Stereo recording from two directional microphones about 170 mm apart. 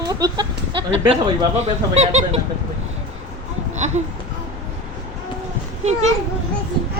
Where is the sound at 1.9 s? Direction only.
40° right (ahead or behind).